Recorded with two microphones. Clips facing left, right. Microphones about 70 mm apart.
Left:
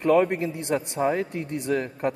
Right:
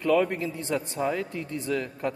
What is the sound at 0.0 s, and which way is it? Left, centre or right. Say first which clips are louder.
A woman's voice: left 3 dB; left.